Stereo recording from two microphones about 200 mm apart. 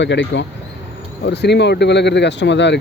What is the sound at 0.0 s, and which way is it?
Speech, 65° left (ahead or behind).